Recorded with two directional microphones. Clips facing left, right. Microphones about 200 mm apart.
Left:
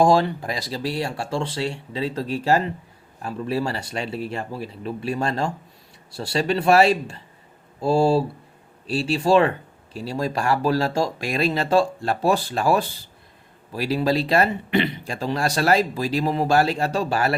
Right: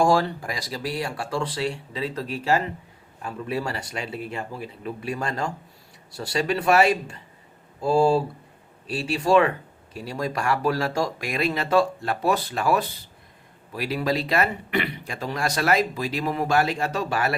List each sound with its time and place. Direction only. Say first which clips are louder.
0.0 s speech: left 3 dB; 20° left (ahead or behind)